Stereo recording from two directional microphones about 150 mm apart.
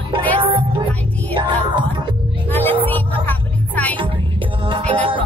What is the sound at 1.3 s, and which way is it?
Music, 30° right (ahead or behind).